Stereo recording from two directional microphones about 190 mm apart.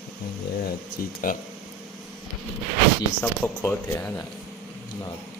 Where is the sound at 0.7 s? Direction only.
50° left (ahead or behind).